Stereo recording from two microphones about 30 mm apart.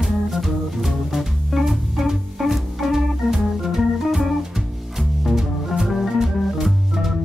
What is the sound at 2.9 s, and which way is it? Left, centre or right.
Organ, centre.